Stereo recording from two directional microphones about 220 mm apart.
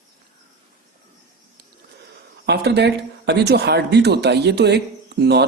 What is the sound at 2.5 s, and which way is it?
Speech, 50° right (ahead or behind).